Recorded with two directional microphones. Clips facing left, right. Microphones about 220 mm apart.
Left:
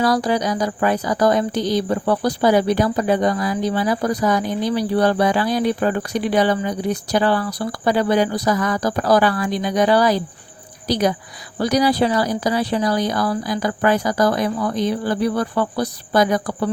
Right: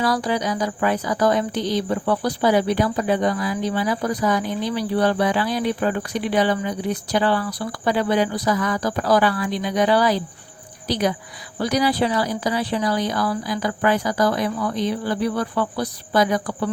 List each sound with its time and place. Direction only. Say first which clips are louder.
0.0 s speech: left 3 dB; 40° left (ahead or behind)